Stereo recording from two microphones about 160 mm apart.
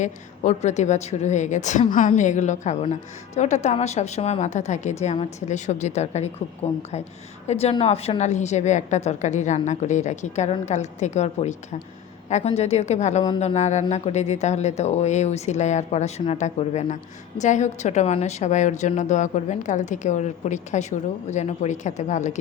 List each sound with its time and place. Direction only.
0.0 s speech: 50° left (ahead or behind)